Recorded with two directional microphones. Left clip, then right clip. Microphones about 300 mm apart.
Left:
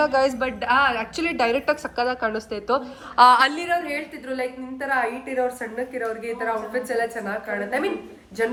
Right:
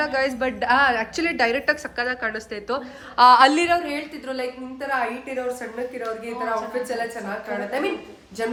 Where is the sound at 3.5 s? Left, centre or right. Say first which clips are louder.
Right 4 dB; right.